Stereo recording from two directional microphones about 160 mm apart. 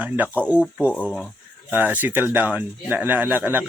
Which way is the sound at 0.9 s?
10° left (ahead or behind).